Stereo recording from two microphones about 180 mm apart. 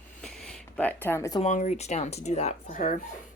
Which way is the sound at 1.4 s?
40° left (ahead or behind).